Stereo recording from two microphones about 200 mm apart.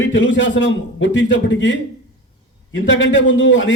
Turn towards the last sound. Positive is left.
turn(degrees=70)  # may be behind; listen again after turning